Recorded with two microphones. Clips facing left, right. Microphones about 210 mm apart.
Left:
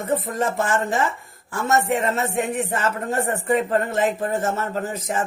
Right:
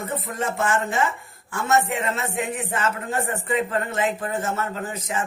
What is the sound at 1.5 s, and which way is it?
Speech, 40° left (ahead or behind).